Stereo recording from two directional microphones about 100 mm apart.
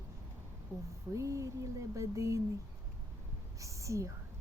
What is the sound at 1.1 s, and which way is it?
Speech, 30° right (ahead or behind).